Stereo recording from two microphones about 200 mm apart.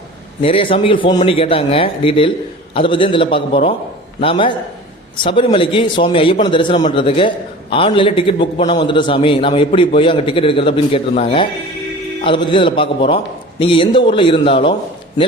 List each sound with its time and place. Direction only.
0.4 s a man's voice: 25° left (ahead or behind)